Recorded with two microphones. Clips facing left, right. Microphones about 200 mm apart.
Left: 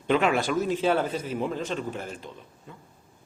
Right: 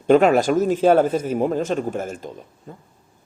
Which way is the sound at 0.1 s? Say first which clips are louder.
Right 9 dB; 40° right (ahead or behind).